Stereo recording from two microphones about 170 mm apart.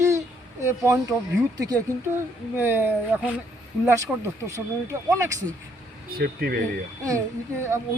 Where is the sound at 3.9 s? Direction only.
15° right (ahead or behind).